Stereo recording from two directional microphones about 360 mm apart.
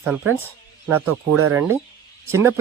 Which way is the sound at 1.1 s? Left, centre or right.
Right.